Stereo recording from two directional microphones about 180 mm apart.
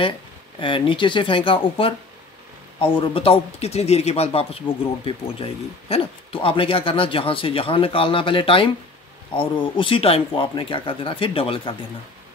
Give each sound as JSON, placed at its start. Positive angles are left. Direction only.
{"t": 0.6, "sound": "speech", "side_deg": 30}